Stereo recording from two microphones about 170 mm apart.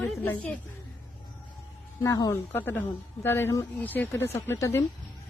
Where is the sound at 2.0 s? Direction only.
20° left (ahead or behind).